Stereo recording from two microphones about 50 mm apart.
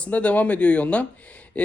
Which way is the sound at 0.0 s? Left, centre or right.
Left.